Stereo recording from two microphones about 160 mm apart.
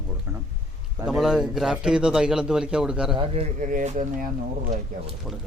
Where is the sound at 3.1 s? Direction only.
40° right (ahead or behind).